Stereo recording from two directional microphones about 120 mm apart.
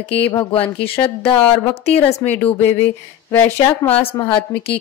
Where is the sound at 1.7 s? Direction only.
60° left (ahead or behind).